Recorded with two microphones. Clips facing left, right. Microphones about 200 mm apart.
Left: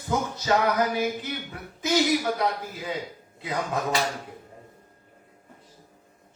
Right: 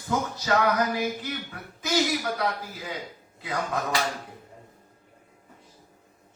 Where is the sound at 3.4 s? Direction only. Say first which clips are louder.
Left 1 dB; 25° left (ahead or behind).